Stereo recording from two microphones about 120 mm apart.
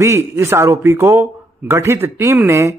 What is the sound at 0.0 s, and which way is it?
A man's voice, 20° right (ahead or behind).